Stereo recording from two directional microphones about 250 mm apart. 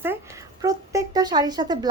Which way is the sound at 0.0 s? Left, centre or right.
Centre.